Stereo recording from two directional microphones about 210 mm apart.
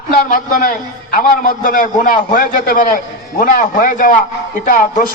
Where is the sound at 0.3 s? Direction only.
40° left (ahead or behind).